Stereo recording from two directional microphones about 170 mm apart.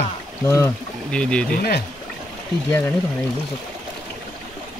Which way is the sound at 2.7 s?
15° left (ahead or behind).